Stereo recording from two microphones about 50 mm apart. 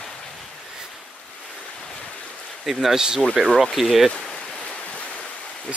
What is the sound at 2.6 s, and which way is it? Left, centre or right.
Speech, centre.